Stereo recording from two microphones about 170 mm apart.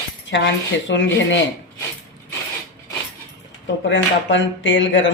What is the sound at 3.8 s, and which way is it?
Speech, 90° left.